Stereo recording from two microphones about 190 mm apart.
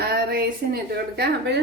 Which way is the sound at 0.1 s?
55° right (ahead or behind).